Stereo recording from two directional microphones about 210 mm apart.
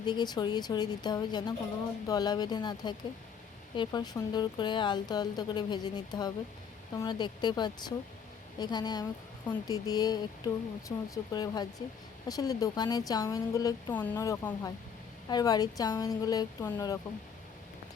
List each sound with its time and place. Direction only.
0.0 s a woman's voice: 20° left (ahead or behind)